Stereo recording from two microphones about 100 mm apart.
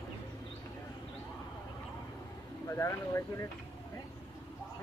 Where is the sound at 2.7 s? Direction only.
30° left (ahead or behind).